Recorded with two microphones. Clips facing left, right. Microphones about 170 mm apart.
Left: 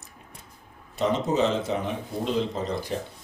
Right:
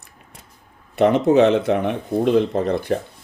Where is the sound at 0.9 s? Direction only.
65° right (ahead or behind).